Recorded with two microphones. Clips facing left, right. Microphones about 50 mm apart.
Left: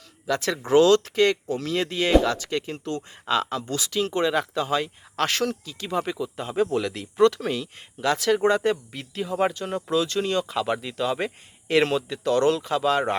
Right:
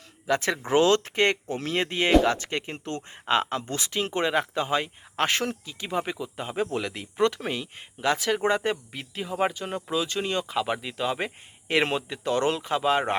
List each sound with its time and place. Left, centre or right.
0.3 s speech: right